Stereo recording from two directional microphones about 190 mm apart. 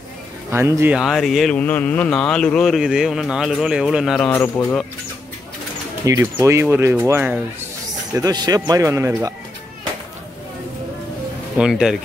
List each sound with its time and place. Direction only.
0.5 s speech: 15° right (ahead or behind)
4.3 s speech: 10° left (ahead or behind)
6.0 s speech: 15° right (ahead or behind)
11.5 s speech: 5° right (ahead or behind)